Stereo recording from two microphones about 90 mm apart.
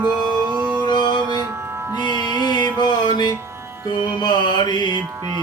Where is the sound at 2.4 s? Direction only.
50° left (ahead or behind).